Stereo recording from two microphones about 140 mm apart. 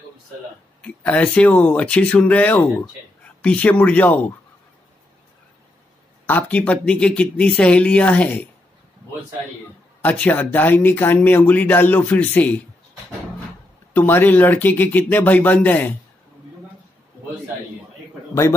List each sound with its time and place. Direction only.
0.8 s speech: 10° left (ahead or behind)
6.2 s speech: 10° left (ahead or behind)
10.0 s speech: 10° left (ahead or behind)
13.9 s speech: 15° left (ahead or behind)